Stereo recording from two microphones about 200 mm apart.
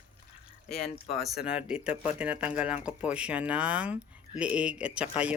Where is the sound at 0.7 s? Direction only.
30° left (ahead or behind).